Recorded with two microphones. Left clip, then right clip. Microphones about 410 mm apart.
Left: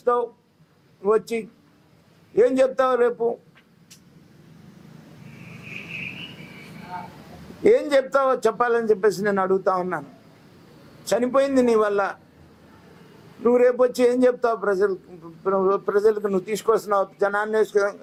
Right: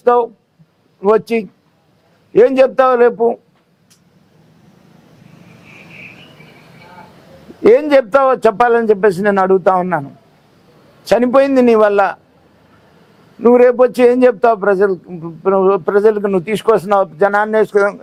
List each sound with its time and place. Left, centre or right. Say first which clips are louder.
0.0 s a man's voice: right 10 dB; right
7.6 s a man's voice: right 9 dB; right
11.0 s a man's voice: right 9 dB; right
13.4 s a man's voice: right 9 dB; right